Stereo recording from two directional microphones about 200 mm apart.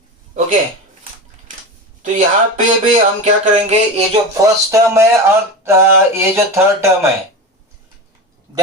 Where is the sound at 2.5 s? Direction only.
40° right (ahead or behind).